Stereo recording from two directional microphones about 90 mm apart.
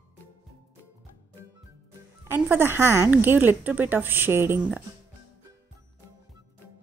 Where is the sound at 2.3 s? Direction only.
25° right (ahead or behind).